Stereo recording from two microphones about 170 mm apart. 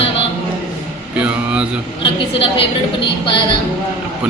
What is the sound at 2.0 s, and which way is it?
A woman's voice, 30° left (ahead or behind).